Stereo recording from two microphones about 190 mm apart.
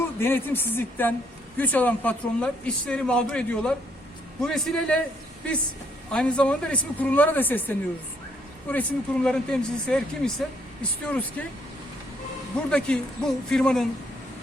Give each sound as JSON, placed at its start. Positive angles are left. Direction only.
{"t": 0.2, "sound": "speech", "side_deg": 10}
{"t": 6.1, "sound": "speech", "side_deg": 5}
{"t": 12.7, "sound": "speech", "side_deg": 5}